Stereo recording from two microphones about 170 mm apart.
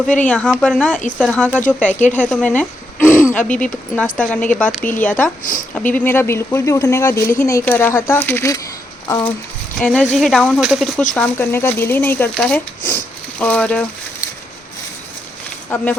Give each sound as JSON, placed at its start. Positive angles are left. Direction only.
{"t": 0.2, "sound": "speech", "side_deg": 10}
{"t": 9.0, "sound": "a sound", "side_deg": 20}
{"t": 9.7, "sound": "speech", "side_deg": 5}
{"t": 11.1, "sound": "speech", "side_deg": 10}
{"t": 15.7, "sound": "speech", "side_deg": 10}